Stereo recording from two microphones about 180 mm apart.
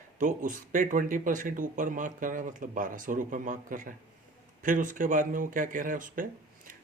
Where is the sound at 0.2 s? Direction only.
45° right (ahead or behind).